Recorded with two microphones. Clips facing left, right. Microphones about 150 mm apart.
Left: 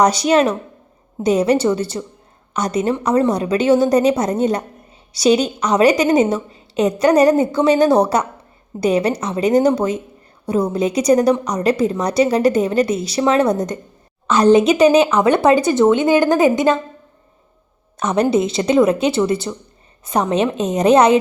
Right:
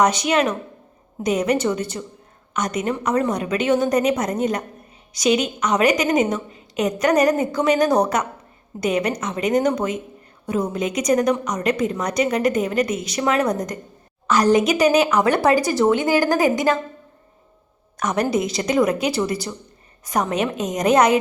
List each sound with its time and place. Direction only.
0.0 s a woman's voice: 35° left (ahead or behind)
17.9 s speech: 25° left (ahead or behind)